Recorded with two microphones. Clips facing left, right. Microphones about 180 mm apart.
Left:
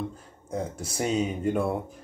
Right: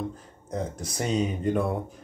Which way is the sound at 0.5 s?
5° left (ahead or behind).